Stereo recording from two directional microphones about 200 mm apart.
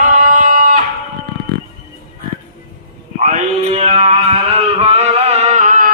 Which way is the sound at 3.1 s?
35° right (ahead or behind).